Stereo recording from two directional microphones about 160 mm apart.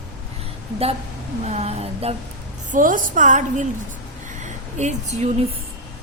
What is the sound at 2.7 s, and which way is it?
A woman's voice, 55° right (ahead or behind).